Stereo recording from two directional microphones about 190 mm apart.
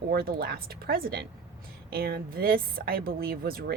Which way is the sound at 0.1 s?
50° right (ahead or behind).